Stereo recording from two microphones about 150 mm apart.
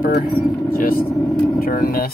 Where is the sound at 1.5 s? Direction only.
75° left (ahead or behind).